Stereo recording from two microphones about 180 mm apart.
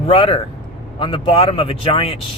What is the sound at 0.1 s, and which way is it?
Speech, 30° left (ahead or behind).